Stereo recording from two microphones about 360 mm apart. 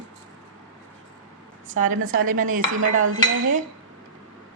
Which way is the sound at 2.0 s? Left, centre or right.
Right.